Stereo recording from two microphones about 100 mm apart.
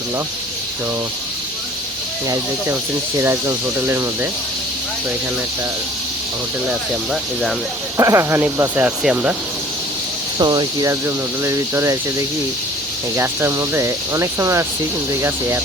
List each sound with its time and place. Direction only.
3.2 s cricket: 25° right (ahead or behind)
6.7 s speech: 5° right (ahead or behind)
7.9 s cricket: 30° right (ahead or behind)
8.8 s speech: 15° right (ahead or behind)
10.3 s speech: 45° right (ahead or behind)
11.0 s cricket: 25° right (ahead or behind)
13.1 s cricket: 25° right (ahead or behind)